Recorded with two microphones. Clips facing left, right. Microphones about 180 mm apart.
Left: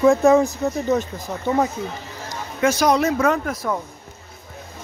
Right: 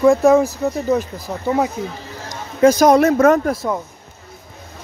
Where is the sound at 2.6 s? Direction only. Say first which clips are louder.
Right 7 dB; 40° right (ahead or behind).